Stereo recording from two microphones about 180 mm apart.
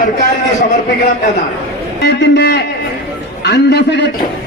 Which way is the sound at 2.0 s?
70° left (ahead or behind).